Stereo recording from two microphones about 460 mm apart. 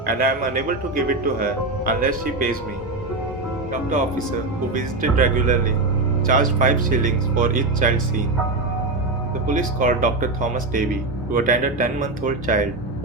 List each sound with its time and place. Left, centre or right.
0.0 s speech: centre
4.7 s speech: centre
9.5 s speech: centre